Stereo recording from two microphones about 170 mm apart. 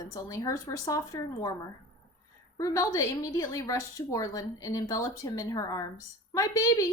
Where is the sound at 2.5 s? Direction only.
20° left (ahead or behind).